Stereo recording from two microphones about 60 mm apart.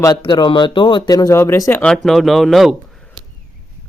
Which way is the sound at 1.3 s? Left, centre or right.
Left.